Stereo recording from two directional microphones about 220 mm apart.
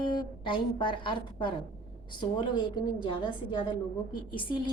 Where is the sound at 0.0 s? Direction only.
20° left (ahead or behind).